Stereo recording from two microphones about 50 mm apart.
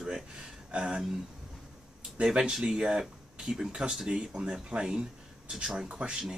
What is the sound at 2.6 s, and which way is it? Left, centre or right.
Speech, centre.